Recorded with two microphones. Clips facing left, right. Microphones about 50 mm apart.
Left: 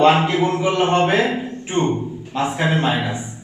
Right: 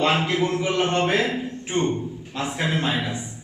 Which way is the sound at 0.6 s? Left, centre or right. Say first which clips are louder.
Left 5 dB; centre.